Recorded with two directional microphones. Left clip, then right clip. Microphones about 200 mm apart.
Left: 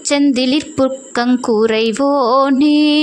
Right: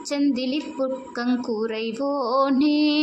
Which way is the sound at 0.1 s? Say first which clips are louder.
Left 10 dB; 40° left (ahead or behind).